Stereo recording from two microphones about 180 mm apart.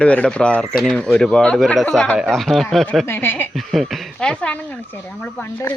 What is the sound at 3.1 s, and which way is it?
Speech, 10° left (ahead or behind).